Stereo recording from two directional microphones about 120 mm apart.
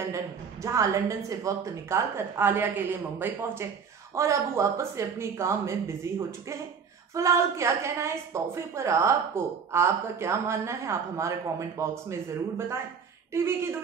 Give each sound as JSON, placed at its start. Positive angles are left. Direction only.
{"t": 0.1, "sound": "a woman's voice", "side_deg": -25}
{"t": 7.2, "sound": "a woman's voice", "side_deg": -25}